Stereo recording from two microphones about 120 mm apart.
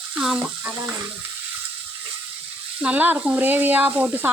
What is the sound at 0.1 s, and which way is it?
Speech, 10° right (ahead or behind).